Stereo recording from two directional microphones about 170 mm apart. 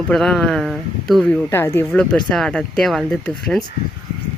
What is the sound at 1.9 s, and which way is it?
Speech, centre (ahead or behind).